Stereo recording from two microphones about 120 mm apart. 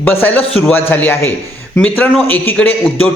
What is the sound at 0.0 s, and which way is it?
A man's voice, 15° left (ahead or behind).